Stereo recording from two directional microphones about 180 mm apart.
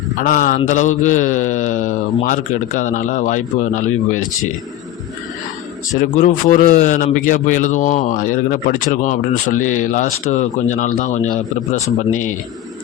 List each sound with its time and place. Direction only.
0.2 s a man's voice: 50° left (ahead or behind)
6.0 s a man's voice: 45° left (ahead or behind)